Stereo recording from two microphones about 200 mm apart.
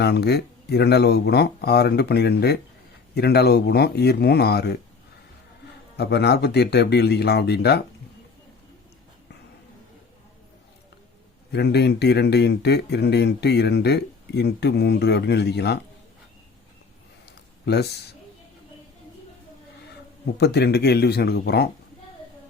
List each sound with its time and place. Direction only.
0.0 s speech: 55° left (ahead or behind)
6.0 s speech: 55° left (ahead or behind)
11.5 s speech: 55° left (ahead or behind)
17.7 s speech: 55° left (ahead or behind)
20.4 s speech: 55° left (ahead or behind)